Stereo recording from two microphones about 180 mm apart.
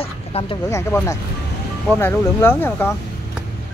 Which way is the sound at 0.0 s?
30° left (ahead or behind).